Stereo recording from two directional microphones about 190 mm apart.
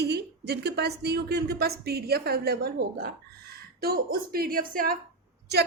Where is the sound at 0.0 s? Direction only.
60° right (ahead or behind).